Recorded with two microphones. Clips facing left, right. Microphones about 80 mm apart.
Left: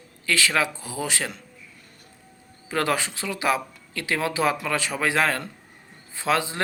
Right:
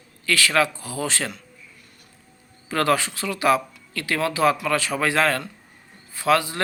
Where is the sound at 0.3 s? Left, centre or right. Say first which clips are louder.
Right 3 dB; left.